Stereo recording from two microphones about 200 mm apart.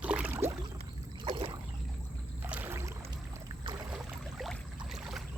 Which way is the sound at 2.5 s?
10° right (ahead or behind).